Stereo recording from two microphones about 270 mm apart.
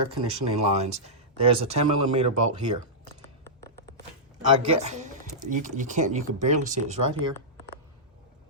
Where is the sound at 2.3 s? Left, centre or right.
Right.